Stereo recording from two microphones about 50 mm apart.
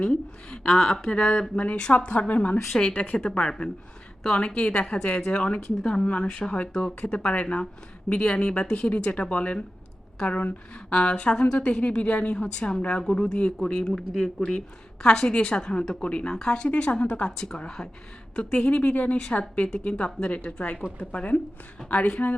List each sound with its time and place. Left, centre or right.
0.0 s speech: centre
1.1 s a woman's voice: left
3.2 s a woman's voice: centre
6.2 s speech: centre
6.5 s a woman's voice: left
15.0 s a woman's voice: centre
17.3 s speech: centre
18.3 s a woman's voice: left
20.3 s a woman's voice: left